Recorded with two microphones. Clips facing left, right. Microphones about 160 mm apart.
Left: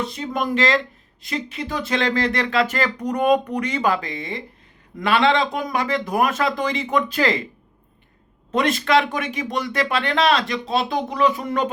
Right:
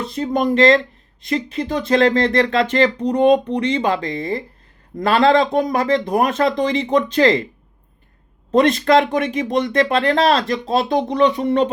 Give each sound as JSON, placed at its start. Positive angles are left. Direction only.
{"t": 0.2, "sound": "speech", "side_deg": -35}
{"t": 8.5, "sound": "speech", "side_deg": -30}